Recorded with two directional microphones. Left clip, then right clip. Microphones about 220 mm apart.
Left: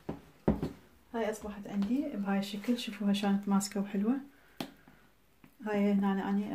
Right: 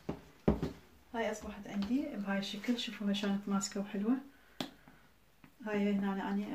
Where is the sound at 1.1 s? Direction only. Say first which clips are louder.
Left 2 dB; 35° left (ahead or behind).